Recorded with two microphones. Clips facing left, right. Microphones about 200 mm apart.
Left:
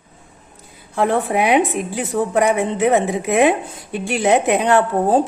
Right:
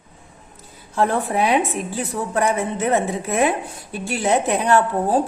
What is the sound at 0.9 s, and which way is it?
A woman's voice, 15° left (ahead or behind).